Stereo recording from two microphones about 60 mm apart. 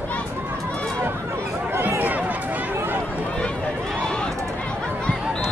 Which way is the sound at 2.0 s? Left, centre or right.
Right.